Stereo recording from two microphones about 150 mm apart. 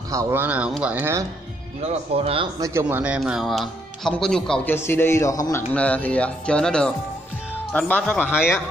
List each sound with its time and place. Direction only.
0.1 s speech: 20° right (ahead or behind)
1.8 s speech: 45° right (ahead or behind)
2.6 s speech: 15° right (ahead or behind); by 4.7 s 5° left (ahead or behind)
4.7 s speech: 15° left (ahead or behind)
5.7 s speech: 10° left (ahead or behind)
8.3 s speech: 5° right (ahead or behind)